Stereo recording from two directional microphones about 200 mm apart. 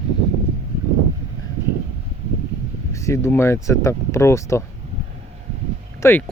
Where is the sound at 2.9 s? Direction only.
15° left (ahead or behind).